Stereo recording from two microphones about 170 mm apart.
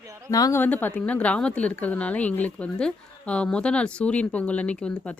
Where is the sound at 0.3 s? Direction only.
20° left (ahead or behind).